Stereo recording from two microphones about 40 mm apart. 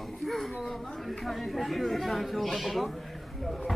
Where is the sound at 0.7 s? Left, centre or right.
Centre.